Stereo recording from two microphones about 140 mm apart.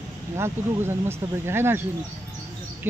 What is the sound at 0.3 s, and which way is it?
Speech, 15° right (ahead or behind).